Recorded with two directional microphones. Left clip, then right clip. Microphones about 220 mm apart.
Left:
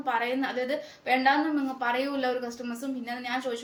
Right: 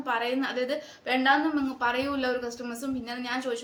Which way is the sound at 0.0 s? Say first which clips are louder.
Even; 15° right (ahead or behind).